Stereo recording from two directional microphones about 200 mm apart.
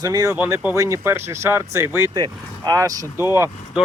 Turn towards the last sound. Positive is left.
turn(degrees=-10)  # may be behind; listen again after turning